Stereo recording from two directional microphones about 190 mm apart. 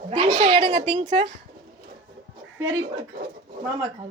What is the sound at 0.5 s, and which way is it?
Speech, 25° right (ahead or behind).